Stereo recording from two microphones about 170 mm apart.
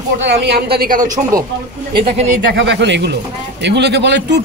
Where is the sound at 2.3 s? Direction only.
90° right.